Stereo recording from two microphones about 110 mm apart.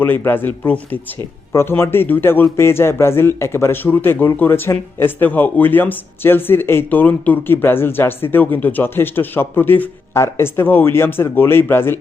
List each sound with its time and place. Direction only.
0.0 s a man's voice: 20° left (ahead or behind)